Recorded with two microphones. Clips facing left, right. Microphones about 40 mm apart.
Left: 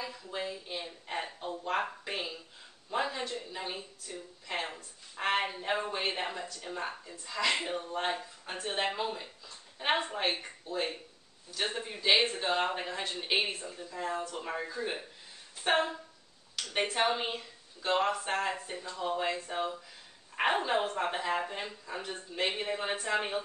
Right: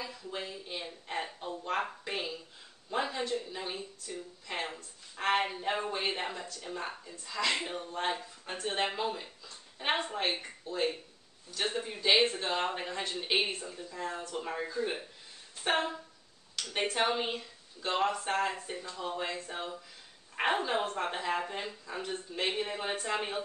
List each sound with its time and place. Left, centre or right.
0.0 s a man's voice: centre